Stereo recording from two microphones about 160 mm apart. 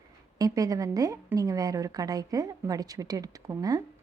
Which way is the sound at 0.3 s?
20° right (ahead or behind).